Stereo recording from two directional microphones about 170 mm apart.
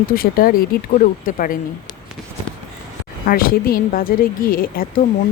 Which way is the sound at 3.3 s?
60° left (ahead or behind).